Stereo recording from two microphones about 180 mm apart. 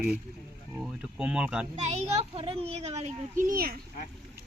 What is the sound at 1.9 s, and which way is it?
A child's voice, 30° right (ahead or behind).